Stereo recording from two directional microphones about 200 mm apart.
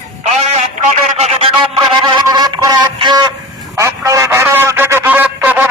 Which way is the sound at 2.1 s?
20° right (ahead or behind).